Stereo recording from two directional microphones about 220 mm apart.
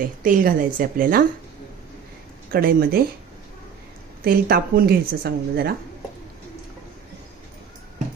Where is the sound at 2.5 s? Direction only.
40° right (ahead or behind).